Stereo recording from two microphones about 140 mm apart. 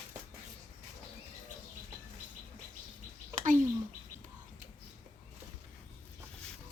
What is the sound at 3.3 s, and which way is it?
Bird, 65° right (ahead or behind).